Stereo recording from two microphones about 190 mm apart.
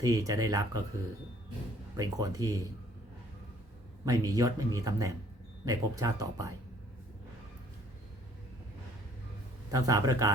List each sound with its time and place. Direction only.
0.0 s a man's voice: 15° right (ahead or behind)
2.0 s speech: 20° right (ahead or behind)
4.0 s a man's voice: 20° right (ahead or behind)
9.7 s a man's voice: 20° right (ahead or behind)